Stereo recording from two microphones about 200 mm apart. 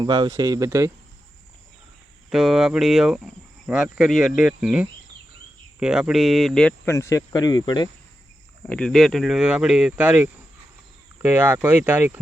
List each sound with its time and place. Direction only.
0.0 s speech: 20° right (ahead or behind)
2.3 s speech: centre (ahead or behind); by 7.9 s 20° left (ahead or behind)
8.6 s speech: 5° left (ahead or behind)